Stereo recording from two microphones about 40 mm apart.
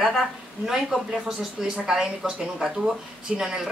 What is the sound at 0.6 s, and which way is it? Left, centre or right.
Speech, centre.